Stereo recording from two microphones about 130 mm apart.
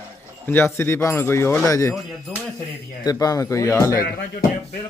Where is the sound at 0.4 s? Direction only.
15° left (ahead or behind).